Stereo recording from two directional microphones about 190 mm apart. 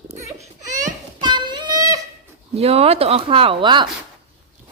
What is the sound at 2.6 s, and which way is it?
Speech, 30° right (ahead or behind).